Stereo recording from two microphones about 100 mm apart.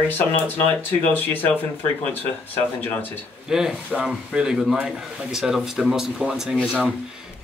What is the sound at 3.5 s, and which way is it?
A man's voice, 5° right (ahead or behind).